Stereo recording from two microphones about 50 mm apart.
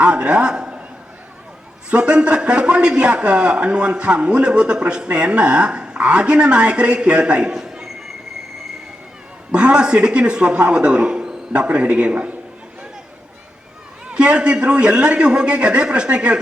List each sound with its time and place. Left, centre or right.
0.0 s a man's voice: right
1.9 s a man's voice: right
7.5 s a sound: centre
9.5 s a man's voice: centre
14.1 s a man's voice: right